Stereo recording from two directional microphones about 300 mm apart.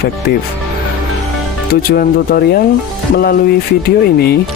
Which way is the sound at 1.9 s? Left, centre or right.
Left.